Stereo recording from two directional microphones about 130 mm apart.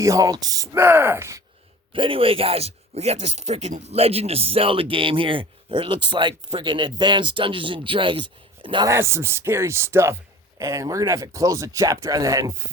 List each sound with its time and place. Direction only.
0.0 s speech: 25° right (ahead or behind)
1.9 s speech: 45° right (ahead or behind)
8.9 s speech: 20° right (ahead or behind)